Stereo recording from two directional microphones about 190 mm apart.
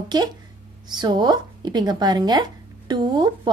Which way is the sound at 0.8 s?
25° right (ahead or behind).